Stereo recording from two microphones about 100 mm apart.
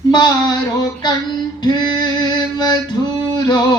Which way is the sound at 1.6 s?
45° left (ahead or behind).